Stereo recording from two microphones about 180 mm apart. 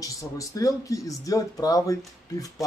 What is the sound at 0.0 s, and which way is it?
Speech, 20° left (ahead or behind).